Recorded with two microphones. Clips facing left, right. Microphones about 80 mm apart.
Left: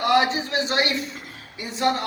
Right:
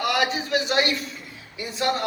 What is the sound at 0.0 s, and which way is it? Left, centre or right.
Speech, left.